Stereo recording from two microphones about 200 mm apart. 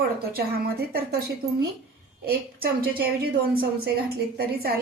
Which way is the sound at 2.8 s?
50° right (ahead or behind).